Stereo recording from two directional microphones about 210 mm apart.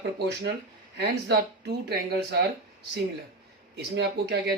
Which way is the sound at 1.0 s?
50° right (ahead or behind).